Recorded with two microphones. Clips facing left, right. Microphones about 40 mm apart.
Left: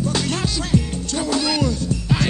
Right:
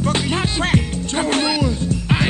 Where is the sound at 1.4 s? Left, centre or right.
Centre.